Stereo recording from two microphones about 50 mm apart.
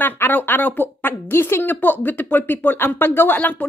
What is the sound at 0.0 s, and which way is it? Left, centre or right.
Speech, left.